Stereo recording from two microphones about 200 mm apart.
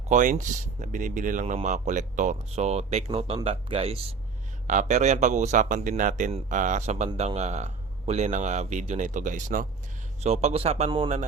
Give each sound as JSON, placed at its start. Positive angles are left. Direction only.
{"t": 0.1, "sound": "speech", "side_deg": -40}